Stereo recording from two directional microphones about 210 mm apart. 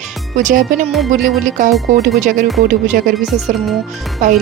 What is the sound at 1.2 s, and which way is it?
Speech, centre (ahead or behind).